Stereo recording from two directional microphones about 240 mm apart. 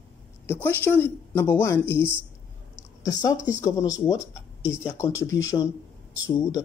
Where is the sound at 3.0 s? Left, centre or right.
Centre.